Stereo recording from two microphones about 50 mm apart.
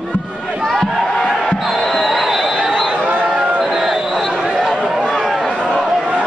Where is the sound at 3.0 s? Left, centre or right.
Right.